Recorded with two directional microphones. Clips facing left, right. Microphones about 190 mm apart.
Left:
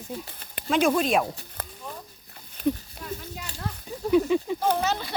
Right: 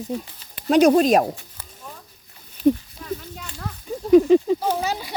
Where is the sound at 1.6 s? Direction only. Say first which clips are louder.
Left 6 dB; 60° left (ahead or behind).